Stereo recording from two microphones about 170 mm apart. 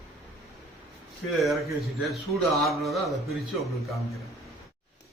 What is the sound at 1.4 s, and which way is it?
A man's voice, centre (ahead or behind).